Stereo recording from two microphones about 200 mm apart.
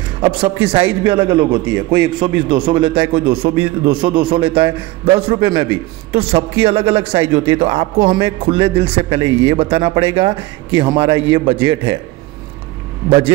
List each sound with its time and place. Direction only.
0.2 s a man's voice: 25° right (ahead or behind)